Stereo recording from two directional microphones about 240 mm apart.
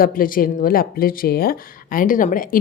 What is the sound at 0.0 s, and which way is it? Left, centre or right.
Speech, left.